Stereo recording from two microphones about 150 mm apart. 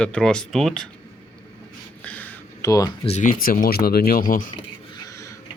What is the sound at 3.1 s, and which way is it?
Speech, 50° left (ahead or behind).